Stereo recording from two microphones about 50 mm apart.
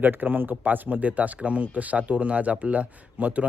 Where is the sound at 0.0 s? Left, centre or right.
Right.